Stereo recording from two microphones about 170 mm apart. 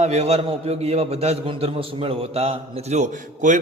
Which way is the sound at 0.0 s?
40° right (ahead or behind).